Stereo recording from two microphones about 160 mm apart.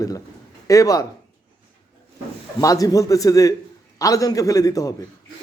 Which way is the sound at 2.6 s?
20° left (ahead or behind).